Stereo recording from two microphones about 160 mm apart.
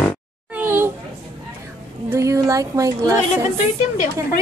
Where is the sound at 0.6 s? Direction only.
15° right (ahead or behind).